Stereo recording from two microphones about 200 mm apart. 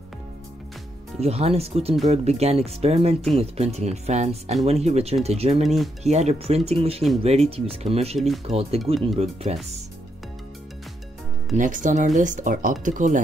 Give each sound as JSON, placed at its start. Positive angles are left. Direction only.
{"t": 1.2, "sound": "speech", "side_deg": -30}
{"t": 11.5, "sound": "speech", "side_deg": -40}